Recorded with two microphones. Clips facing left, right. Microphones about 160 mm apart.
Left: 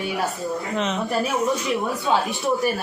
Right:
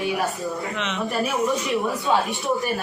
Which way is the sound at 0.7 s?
40° left (ahead or behind).